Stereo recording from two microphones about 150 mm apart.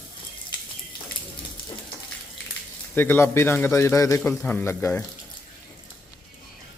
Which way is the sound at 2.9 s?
15° left (ahead or behind).